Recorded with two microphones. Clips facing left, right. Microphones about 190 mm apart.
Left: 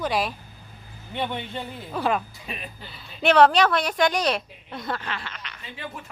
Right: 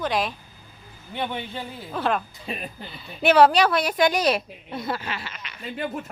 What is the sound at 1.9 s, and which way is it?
A woman's voice, 5° left (ahead or behind).